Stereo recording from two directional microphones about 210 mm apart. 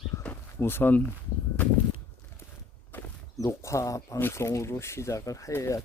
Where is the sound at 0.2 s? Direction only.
10° left (ahead or behind).